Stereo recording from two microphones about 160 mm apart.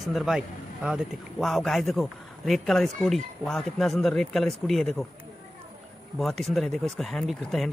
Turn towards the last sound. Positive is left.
turn(degrees=0)  # may be behind; listen again after turning